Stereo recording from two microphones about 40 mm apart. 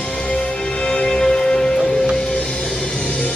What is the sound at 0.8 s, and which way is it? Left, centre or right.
Music, left.